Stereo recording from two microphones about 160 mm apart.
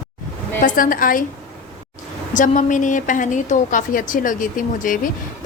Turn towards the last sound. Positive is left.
turn(degrees=55)  # may be behind; listen again after turning